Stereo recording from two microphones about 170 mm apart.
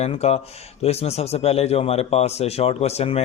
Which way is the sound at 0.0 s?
40° left (ahead or behind).